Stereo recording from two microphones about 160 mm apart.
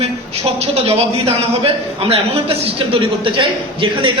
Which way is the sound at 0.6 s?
40° right (ahead or behind).